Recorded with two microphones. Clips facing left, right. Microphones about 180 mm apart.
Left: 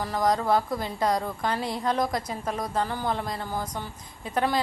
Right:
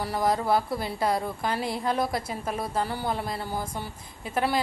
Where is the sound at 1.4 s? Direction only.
10° right (ahead or behind).